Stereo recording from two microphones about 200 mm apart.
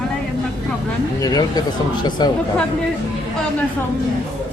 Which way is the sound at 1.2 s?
20° left (ahead or behind).